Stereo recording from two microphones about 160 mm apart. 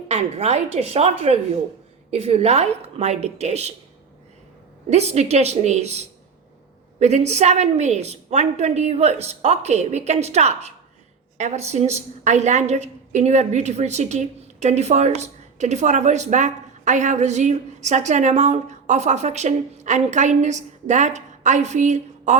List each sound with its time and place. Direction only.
0.1 s a woman's voice: 40° right (ahead or behind)
4.9 s a woman's voice: 45° right (ahead or behind)